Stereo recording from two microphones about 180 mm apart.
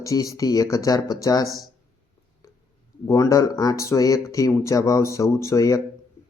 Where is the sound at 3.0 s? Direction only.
15° left (ahead or behind).